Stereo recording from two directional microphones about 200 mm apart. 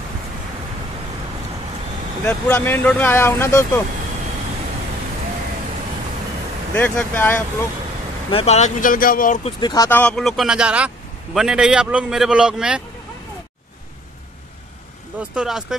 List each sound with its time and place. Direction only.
2.2 s speech: 10° left (ahead or behind)
6.7 s speech: 10° left (ahead or behind)
8.3 s speech: 30° left (ahead or behind)
9.4 s speech: 20° left (ahead or behind); by 12.8 s 5° right (ahead or behind)
15.1 s speech: 5° right (ahead or behind)